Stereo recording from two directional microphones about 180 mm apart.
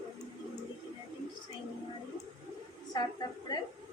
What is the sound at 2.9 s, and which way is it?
Speech, 25° left (ahead or behind).